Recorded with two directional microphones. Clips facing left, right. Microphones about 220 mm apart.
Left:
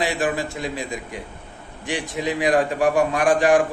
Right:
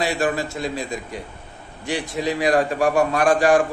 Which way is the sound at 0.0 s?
15° left (ahead or behind).